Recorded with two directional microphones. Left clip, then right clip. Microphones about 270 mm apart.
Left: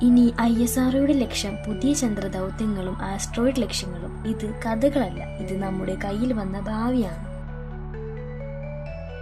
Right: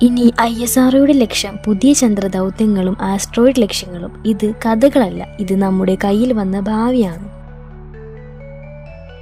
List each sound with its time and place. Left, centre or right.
0.0 s a woman's voice: right